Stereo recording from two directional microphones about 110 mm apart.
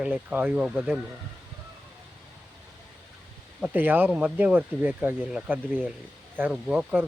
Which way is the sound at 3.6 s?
15° right (ahead or behind).